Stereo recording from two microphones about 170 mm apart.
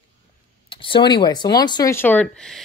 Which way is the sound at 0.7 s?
30° left (ahead or behind).